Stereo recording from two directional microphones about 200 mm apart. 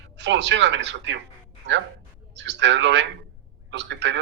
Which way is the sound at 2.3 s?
60° right (ahead or behind).